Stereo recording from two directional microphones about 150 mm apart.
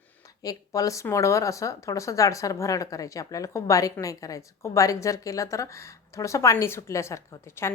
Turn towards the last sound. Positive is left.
turn(degrees=15)  # may be behind; listen again after turning